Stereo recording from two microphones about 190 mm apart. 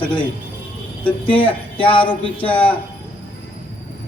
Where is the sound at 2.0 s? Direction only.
5° left (ahead or behind).